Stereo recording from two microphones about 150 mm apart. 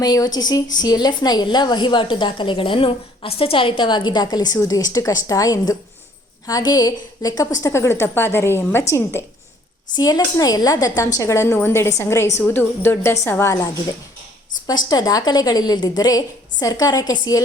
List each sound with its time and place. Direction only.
0.0 s a woman's voice: 25° left (ahead or behind)